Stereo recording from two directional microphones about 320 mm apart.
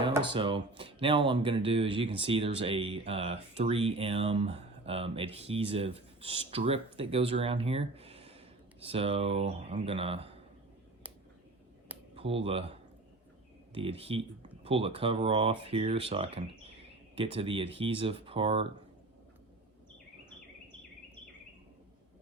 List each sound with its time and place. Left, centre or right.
0.3 s speech: centre
12.1 s speech: centre
13.7 s speech: centre